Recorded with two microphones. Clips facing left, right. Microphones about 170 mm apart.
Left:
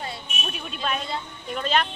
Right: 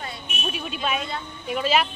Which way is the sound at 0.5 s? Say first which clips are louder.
Right 2 dB; 5° right (ahead or behind).